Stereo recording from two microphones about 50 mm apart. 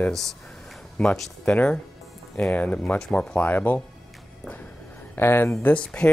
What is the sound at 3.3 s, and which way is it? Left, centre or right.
Speech, left.